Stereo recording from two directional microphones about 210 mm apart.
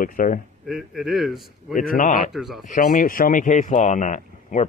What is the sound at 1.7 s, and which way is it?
Speech, 40° left (ahead or behind).